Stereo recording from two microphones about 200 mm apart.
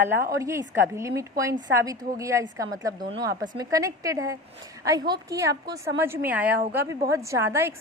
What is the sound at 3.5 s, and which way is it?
A woman's voice, 15° right (ahead or behind).